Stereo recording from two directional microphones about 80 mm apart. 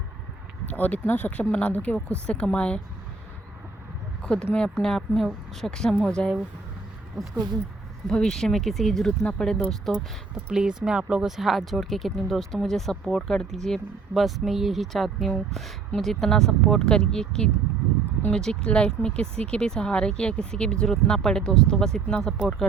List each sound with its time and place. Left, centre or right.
0.6 s speech: centre
4.2 s a sound: centre
4.5 s speech: centre
8.0 s speech: centre
10.5 s speech: centre